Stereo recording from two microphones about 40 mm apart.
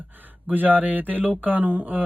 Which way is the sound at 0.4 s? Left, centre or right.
Right.